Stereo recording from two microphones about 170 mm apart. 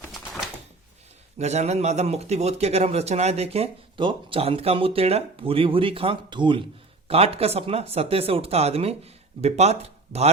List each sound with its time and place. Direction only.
1.4 s a man's voice: 40° right (ahead or behind)